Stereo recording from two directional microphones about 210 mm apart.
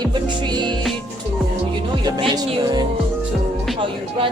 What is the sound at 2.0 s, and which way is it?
Music, 20° right (ahead or behind).